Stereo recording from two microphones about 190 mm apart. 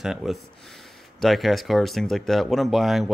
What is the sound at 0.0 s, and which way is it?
Speech, centre (ahead or behind).